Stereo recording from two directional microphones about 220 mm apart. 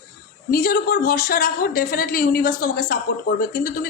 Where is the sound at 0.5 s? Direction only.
40° left (ahead or behind).